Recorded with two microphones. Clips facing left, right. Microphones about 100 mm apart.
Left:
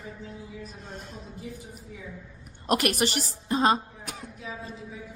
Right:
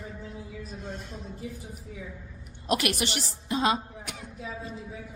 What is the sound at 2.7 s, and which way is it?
A woman's voice, 45° left (ahead or behind).